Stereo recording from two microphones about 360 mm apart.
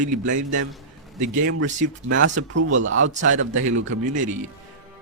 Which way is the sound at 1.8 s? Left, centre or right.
Right.